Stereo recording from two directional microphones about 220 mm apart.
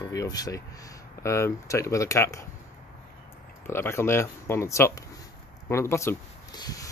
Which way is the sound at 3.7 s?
10° left (ahead or behind).